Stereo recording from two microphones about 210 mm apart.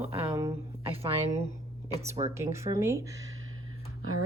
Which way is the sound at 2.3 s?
15° right (ahead or behind).